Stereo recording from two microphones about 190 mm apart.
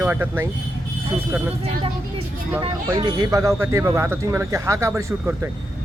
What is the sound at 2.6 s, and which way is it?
Speech, 25° right (ahead or behind).